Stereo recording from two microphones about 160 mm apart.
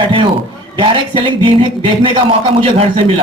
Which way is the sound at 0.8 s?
30° right (ahead or behind).